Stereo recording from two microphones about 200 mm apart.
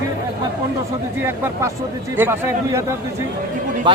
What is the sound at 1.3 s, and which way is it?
Speech, 10° right (ahead or behind).